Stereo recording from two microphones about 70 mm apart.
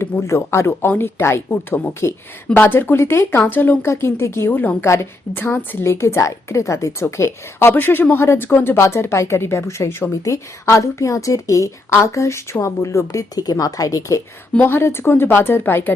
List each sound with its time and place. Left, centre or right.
0.0 s a woman's voice: left
5.8 s a woman's voice: left
14.6 s a woman's voice: left